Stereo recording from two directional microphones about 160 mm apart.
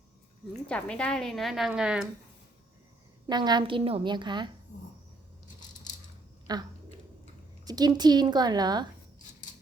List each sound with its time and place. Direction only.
0.7 s a woman's voice: 5° left (ahead or behind)
3.2 s a woman's voice: 25° right (ahead or behind)
6.5 s a woman's voice: 25° right (ahead or behind)